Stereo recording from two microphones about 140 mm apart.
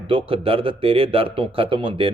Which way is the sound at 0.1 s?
40° right (ahead or behind).